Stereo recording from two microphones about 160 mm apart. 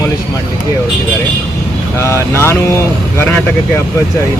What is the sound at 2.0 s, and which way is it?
Speech, 15° left (ahead or behind).